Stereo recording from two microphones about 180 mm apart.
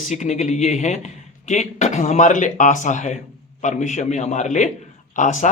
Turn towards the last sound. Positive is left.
turn(degrees=40)  # may be behind; listen again after turning